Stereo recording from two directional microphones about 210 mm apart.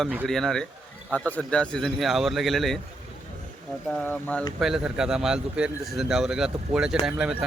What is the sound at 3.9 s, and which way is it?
Speech, 5° left (ahead or behind).